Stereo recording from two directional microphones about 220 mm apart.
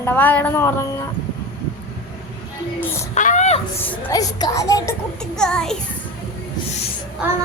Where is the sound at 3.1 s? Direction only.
35° left (ahead or behind).